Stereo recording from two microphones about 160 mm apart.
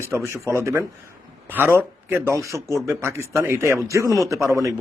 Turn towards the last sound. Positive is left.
turn(degrees=-20)  # may be behind; listen again after turning